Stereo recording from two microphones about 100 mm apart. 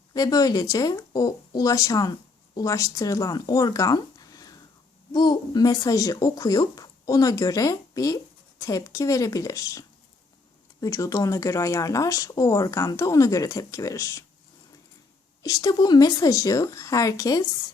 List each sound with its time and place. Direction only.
0.1 s speech: 40° left (ahead or behind)
15.4 s speech: 40° left (ahead or behind)